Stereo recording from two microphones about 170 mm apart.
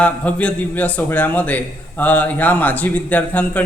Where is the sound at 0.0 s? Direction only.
5° left (ahead or behind).